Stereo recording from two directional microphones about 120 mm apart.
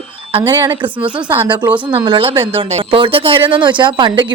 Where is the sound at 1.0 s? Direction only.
10° right (ahead or behind).